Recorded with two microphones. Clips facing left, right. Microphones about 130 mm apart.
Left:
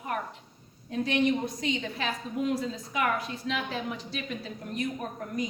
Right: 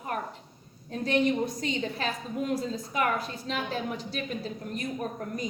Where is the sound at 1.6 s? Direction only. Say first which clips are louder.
Right 1 dB; 40° right (ahead or behind).